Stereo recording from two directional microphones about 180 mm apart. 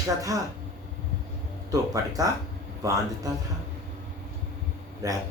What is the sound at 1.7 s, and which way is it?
Speech, 20° right (ahead or behind).